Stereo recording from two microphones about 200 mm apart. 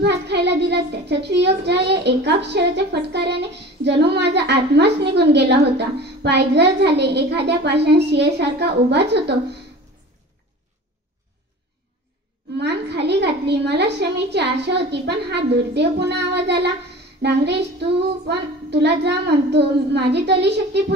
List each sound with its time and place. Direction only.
0.0 s a child's voice: 55° right (ahead or behind)
12.5 s a child's voice: 55° right (ahead or behind)